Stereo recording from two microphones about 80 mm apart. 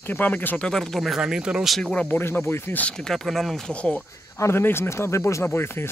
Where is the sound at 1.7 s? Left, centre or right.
Centre.